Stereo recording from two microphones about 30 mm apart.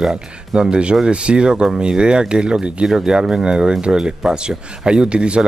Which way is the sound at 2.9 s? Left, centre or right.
Centre.